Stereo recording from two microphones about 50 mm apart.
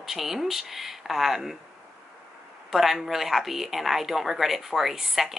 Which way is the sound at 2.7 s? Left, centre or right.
Centre.